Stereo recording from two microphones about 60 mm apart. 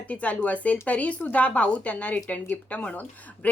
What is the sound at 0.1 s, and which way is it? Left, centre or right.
A woman's voice, left.